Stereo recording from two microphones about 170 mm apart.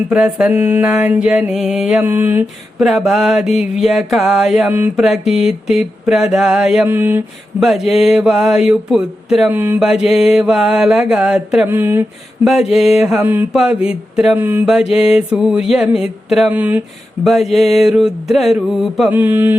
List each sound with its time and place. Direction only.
0.1 s mantra: 5° right (ahead or behind)
5.3 s a sound: 40° left (ahead or behind)
5.6 s mantra: 5° right (ahead or behind)
11.6 s speech: 15° right (ahead or behind)
12.5 s mantra: 5° right (ahead or behind)